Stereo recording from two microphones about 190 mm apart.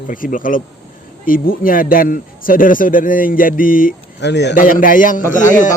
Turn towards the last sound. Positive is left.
turn(degrees=45)  # may be behind; listen again after turning